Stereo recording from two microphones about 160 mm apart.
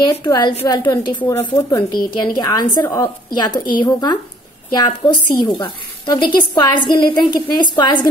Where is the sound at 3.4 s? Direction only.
30° left (ahead or behind).